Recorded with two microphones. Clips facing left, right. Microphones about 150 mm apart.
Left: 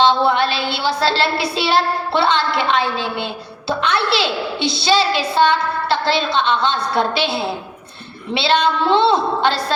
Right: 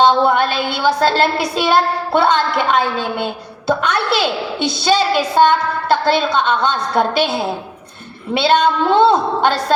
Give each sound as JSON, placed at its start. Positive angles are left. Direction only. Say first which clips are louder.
{"t": 0.0, "sound": "a woman's voice", "louder": "right 2 dB", "side_deg": -45}